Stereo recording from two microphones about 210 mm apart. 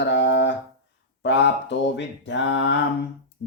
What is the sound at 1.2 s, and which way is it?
Speech, 55° left (ahead or behind).